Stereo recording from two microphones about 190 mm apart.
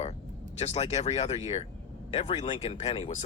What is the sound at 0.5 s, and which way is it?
Speech, 35° left (ahead or behind).